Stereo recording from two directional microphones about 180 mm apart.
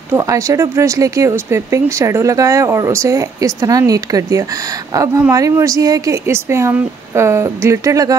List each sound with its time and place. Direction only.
0.1 s speech: 15° right (ahead or behind)